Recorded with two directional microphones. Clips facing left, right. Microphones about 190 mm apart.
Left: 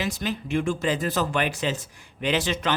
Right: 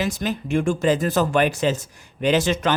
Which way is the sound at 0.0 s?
45° right (ahead or behind).